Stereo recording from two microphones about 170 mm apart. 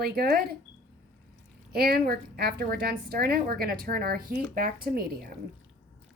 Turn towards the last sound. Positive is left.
turn(degrees=-60)  # may be behind; listen again after turning